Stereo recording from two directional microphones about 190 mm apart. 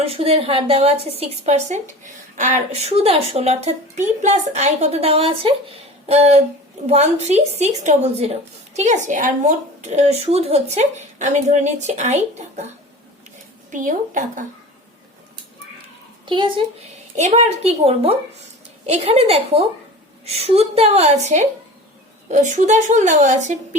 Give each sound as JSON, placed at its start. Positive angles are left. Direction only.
{"t": 0.0, "sound": "a woman's voice", "side_deg": -30}
{"t": 16.2, "sound": "speech", "side_deg": -25}
{"t": 17.2, "sound": "a woman's voice", "side_deg": -35}